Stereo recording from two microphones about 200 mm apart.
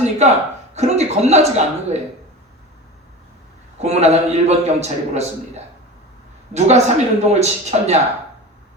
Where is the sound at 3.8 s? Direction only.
30° right (ahead or behind).